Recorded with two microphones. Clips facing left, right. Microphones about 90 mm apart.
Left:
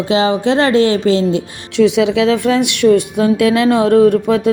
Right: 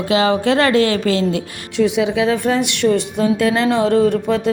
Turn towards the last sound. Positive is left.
turn(degrees=55)  # may be behind; listen again after turning